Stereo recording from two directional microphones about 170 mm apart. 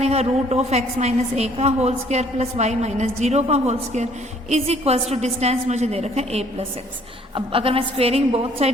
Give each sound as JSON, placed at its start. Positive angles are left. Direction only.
{"t": 0.0, "sound": "a woman's voice", "side_deg": -40}